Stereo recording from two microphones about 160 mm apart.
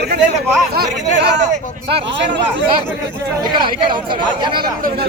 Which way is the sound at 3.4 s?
30° right (ahead or behind).